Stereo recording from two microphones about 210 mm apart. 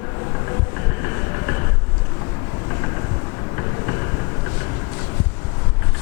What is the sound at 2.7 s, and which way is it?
Vehicle, 20° left (ahead or behind).